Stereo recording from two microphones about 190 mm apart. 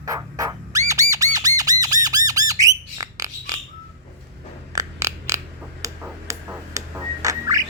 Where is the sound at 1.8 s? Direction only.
20° right (ahead or behind).